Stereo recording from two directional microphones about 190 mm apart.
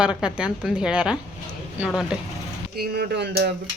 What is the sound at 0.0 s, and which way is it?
Speech, 5° right (ahead or behind).